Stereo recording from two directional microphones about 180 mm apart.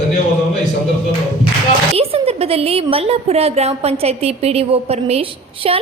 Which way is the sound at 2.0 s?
35° right (ahead or behind).